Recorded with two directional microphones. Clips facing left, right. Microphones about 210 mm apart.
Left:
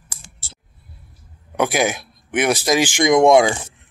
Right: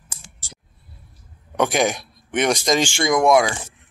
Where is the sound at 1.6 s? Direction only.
5° left (ahead or behind).